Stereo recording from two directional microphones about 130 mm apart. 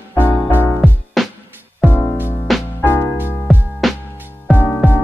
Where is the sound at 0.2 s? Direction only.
15° left (ahead or behind).